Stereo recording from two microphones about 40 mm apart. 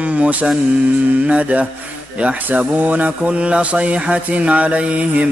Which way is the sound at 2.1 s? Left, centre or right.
Right.